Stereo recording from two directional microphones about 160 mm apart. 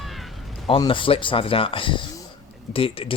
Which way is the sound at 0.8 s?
30° left (ahead or behind).